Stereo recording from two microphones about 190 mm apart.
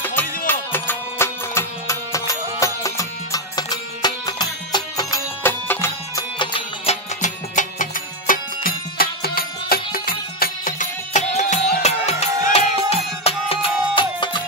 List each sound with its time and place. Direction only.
0.0 s music: 10° left (ahead or behind)
6.3 s music: 25° left (ahead or behind)
7.2 s music: 40° left (ahead or behind); by 14.4 s 25° left (ahead or behind)